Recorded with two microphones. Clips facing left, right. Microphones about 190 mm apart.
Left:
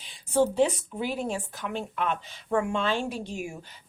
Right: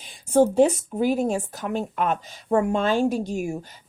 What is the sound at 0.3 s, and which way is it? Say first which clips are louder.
Speech: right 6 dB; 45° right (ahead or behind).